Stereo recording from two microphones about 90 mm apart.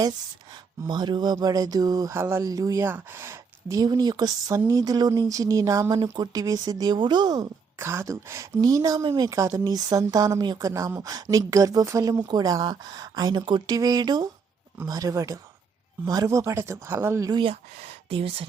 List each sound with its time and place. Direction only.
0.9 s speech: 55° right (ahead or behind)
2.1 s speech: 25° right (ahead or behind)
2.4 s a woman's voice: 40° right (ahead or behind)
2.8 s speech: 25° right (ahead or behind)
3.8 s a woman's voice: 50° right (ahead or behind); by 5.9 s 35° right (ahead or behind)
5.9 s speech: 45° right (ahead or behind)
7.8 s a woman's voice: 30° right (ahead or behind)
9.0 s a woman's voice: 50° right (ahead or behind)
13.7 s a woman's voice: 45° right (ahead or behind); by 17.2 s 25° right (ahead or behind)
17.4 s speech: 90° right